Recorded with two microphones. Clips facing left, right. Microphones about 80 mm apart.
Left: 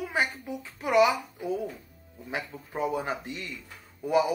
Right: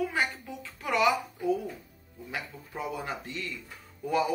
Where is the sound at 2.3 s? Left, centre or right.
Left.